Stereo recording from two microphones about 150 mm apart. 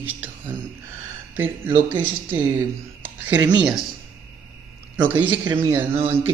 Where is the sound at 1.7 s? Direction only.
15° right (ahead or behind).